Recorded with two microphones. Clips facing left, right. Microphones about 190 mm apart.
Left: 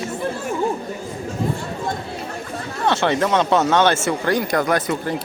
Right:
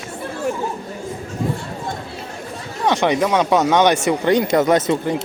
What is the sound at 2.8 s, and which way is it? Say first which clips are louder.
Speech: right 2 dB; 15° right (ahead or behind).